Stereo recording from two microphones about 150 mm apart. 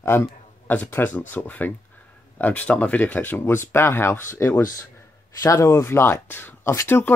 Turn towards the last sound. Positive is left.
turn(degrees=15)  # may be behind; listen again after turning